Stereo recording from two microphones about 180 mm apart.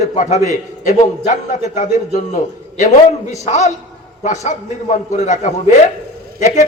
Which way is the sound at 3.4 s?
40° left (ahead or behind).